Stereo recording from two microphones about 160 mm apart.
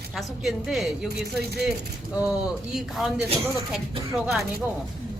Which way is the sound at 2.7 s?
Centre (ahead or behind).